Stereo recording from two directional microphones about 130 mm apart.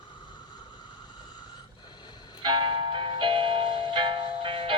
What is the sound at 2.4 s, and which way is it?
Music, 35° right (ahead or behind).